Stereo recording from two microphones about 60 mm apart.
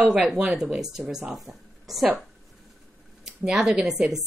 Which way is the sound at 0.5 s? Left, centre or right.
Centre.